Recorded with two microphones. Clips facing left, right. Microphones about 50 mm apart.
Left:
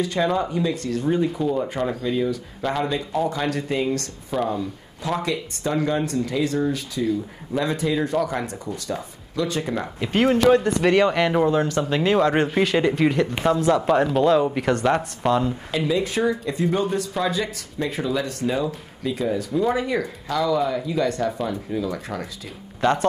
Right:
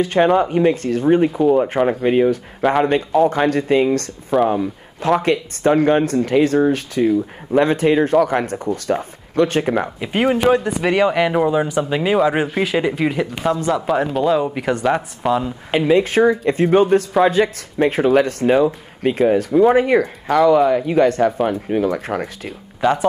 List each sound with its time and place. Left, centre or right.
0.0 s speech: right
4.5 s speech: right
9.8 s speech: centre
15.7 s speech: right
22.8 s speech: centre